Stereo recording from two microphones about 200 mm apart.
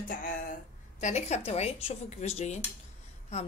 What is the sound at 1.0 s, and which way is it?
Speech, 35° left (ahead or behind).